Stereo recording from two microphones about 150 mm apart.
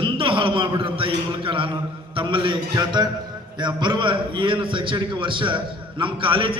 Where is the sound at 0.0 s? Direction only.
35° right (ahead or behind).